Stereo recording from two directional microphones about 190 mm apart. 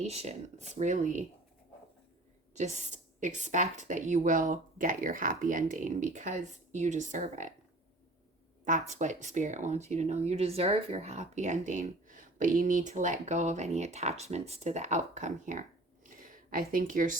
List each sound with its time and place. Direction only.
0.0 s speech: 35° right (ahead or behind)
2.6 s a woman's voice: 40° right (ahead or behind)
8.9 s speech: 40° right (ahead or behind)
16.0 s a sound: 45° right (ahead or behind)